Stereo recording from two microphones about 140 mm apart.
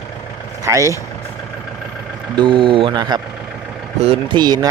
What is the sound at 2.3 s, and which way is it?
Speech, 35° right (ahead or behind).